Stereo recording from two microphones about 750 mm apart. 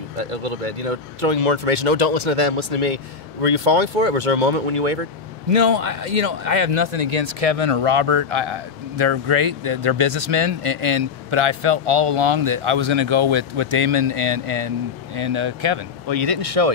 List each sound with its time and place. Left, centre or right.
0.2 s speech: right
5.5 s speech: right